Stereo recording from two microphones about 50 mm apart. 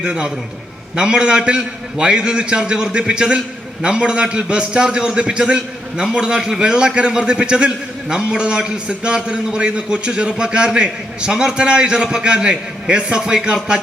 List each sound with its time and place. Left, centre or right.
0.0 s a man's voice: centre